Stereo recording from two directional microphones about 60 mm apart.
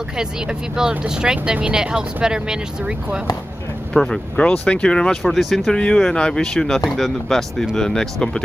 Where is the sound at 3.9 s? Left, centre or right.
Centre.